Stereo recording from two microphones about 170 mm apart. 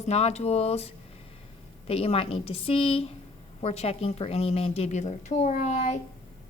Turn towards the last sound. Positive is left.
turn(degrees=40)  # may be behind; listen again after turning